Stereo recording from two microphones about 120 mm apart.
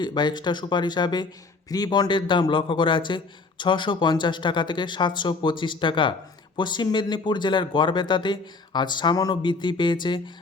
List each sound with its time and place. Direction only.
0.0 s speech: 40° left (ahead or behind)